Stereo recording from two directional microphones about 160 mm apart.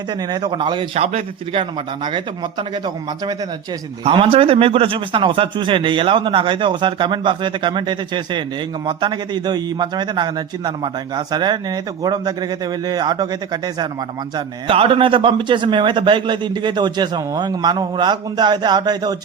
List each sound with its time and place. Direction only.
0.1 s a man's voice: 25° right (ahead or behind)
2.0 s a man's voice: 30° right (ahead or behind)